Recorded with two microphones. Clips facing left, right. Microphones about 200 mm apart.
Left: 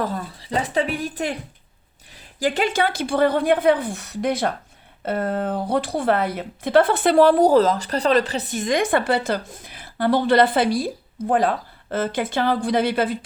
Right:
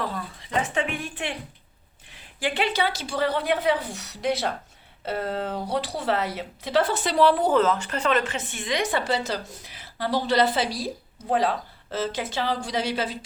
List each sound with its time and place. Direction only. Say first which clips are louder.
0.0 s a woman's voice: left 5 dB; 40° left (ahead or behind)